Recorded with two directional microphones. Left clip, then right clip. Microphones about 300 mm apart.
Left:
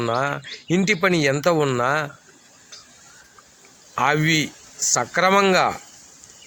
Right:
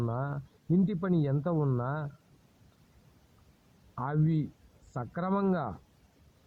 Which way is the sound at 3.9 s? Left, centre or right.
Right.